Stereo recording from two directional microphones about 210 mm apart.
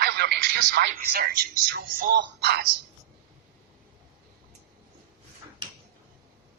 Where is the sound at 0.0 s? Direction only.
50° right (ahead or behind).